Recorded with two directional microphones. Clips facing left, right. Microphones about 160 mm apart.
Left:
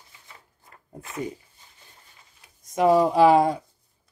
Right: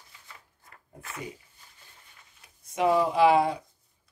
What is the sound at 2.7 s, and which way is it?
Speech, 40° left (ahead or behind).